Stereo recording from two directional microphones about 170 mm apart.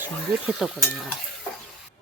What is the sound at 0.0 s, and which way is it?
Speech, 5° right (ahead or behind).